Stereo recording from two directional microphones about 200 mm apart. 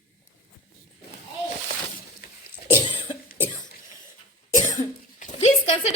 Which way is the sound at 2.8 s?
25° left (ahead or behind).